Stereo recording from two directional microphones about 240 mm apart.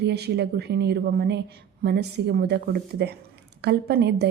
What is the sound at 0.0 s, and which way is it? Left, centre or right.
A woman's voice, right.